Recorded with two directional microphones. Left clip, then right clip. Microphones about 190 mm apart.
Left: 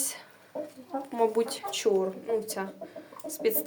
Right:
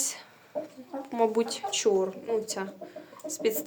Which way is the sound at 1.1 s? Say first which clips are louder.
Right 1 dB; 10° right (ahead or behind).